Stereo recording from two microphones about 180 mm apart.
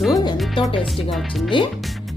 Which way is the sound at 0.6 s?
30° left (ahead or behind).